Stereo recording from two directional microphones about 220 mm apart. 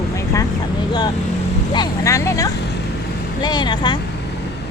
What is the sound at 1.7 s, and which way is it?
Speech, 15° left (ahead or behind).